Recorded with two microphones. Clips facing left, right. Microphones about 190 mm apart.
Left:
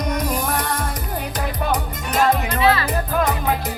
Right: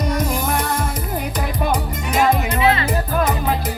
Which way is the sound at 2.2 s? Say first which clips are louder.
Right 1 dB; 10° right (ahead or behind).